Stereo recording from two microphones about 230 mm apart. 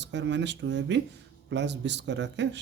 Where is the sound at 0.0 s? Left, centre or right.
Right.